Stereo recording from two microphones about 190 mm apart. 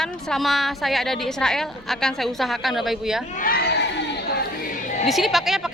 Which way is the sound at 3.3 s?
50° left (ahead or behind).